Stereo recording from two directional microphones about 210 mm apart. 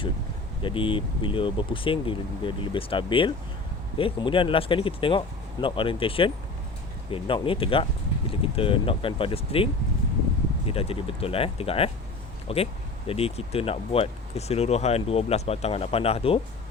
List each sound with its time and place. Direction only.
0.6 s speech: 25° left (ahead or behind)
10.7 s speech: 25° left (ahead or behind)